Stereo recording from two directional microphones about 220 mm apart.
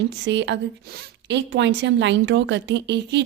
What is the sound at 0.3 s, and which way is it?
A woman's voice, 55° right (ahead or behind).